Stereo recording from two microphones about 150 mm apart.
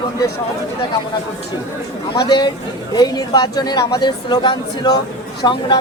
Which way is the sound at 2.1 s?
30° left (ahead or behind).